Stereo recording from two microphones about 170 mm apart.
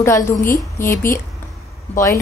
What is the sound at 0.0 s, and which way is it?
Speech, 15° left (ahead or behind).